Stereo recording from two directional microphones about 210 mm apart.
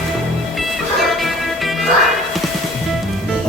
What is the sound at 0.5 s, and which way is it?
Music, centre (ahead or behind).